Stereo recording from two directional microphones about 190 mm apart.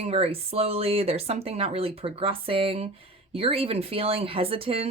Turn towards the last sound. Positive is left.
turn(degrees=-30)  # may be behind; listen again after turning